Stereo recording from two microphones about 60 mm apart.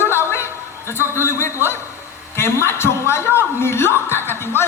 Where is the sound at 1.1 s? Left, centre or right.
Left.